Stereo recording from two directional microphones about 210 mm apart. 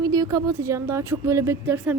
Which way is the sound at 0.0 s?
20° right (ahead or behind).